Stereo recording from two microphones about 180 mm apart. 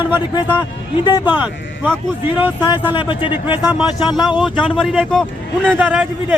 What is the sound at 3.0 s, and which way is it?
Speech, 30° left (ahead or behind).